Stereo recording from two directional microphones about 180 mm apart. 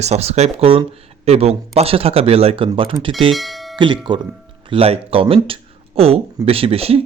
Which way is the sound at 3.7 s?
25° right (ahead or behind).